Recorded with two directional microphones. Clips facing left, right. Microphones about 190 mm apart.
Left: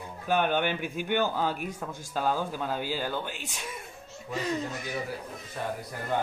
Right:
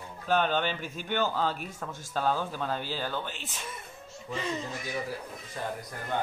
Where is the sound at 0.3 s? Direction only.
15° left (ahead or behind).